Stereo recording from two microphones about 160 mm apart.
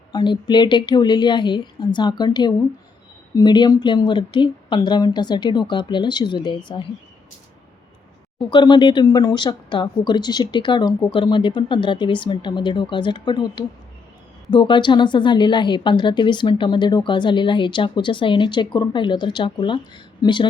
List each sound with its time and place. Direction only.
0.1 s speech: 25° left (ahead or behind)
8.4 s speech: 30° left (ahead or behind)